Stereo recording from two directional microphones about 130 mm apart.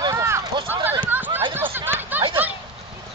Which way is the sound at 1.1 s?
15° right (ahead or behind).